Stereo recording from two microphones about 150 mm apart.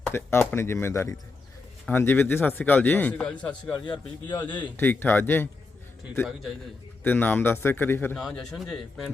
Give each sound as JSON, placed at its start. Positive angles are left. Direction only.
{"t": 0.1, "sound": "a man's voice", "side_deg": 15}
{"t": 3.8, "sound": "a man's voice", "side_deg": 30}
{"t": 4.8, "sound": "a man's voice", "side_deg": 15}
{"t": 7.0, "sound": "a man's voice", "side_deg": 10}
{"t": 8.1, "sound": "speech", "side_deg": 5}